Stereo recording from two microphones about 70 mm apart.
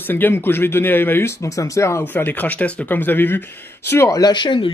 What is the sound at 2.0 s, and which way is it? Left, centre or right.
Speech, left.